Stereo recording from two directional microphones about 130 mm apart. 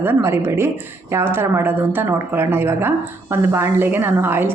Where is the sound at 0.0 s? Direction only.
15° right (ahead or behind).